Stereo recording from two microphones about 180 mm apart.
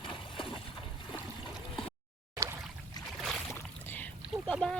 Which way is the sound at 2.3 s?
15° right (ahead or behind).